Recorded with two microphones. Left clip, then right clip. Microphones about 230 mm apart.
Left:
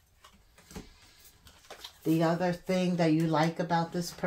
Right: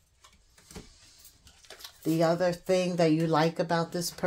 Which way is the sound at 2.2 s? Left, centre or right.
Right.